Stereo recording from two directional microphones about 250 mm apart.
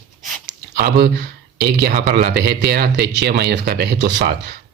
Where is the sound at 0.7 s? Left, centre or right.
Right.